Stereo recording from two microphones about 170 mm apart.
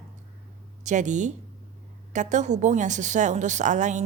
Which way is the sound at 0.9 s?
45° right (ahead or behind).